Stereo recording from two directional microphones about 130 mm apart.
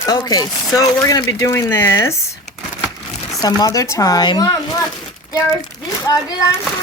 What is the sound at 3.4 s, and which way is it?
Speech, 30° left (ahead or behind).